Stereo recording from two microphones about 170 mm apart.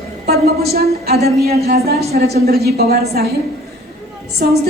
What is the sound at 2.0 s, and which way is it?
Speech, 40° right (ahead or behind).